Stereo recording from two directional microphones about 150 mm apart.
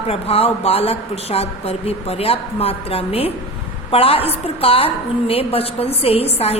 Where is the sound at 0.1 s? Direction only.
40° left (ahead or behind).